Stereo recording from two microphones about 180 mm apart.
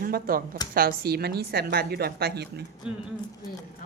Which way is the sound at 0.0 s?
55° right (ahead or behind).